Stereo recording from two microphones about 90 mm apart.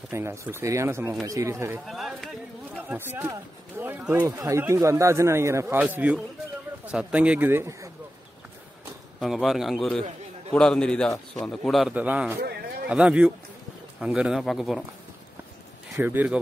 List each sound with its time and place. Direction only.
0.1 s a man's voice: 30° right (ahead or behind)
1.9 s a sound: centre (ahead or behind)
2.9 s a sound: 25° right (ahead or behind)
4.1 s a man's voice: 30° right (ahead or behind)
5.8 s speech: 15° right (ahead or behind)
9.2 s a man's voice: 5° right (ahead or behind)
11.9 s speech: 15° right (ahead or behind); by 14.9 s centre (ahead or behind)
16.0 s speech: 25° right (ahead or behind)